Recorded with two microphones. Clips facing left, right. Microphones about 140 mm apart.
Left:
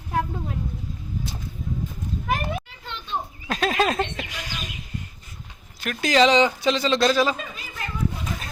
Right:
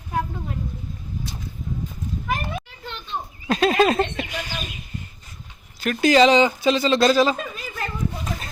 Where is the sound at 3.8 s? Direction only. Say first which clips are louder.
Right 4 dB; centre (ahead or behind).